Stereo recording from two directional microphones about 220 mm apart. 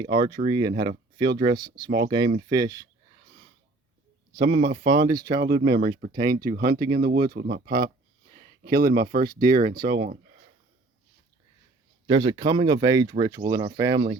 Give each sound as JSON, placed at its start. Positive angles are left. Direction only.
{"t": 0.0, "sound": "speech", "side_deg": -20}
{"t": 1.9, "sound": "speech", "side_deg": -55}
{"t": 2.1, "sound": "speech", "side_deg": -20}
{"t": 4.4, "sound": "speech", "side_deg": -55}
{"t": 4.9, "sound": "speech", "side_deg": -20}
{"t": 5.8, "sound": "speech", "side_deg": -40}
{"t": 12.0, "sound": "speech", "side_deg": -20}